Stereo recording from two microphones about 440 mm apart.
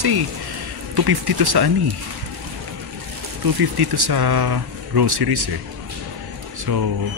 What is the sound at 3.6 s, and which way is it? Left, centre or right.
Speech, right.